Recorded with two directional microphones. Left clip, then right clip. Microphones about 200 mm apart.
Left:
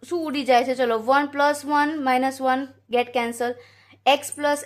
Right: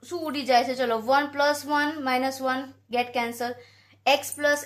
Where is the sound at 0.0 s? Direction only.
45° left (ahead or behind).